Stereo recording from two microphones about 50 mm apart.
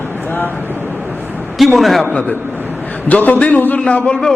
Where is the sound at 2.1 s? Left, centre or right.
Left.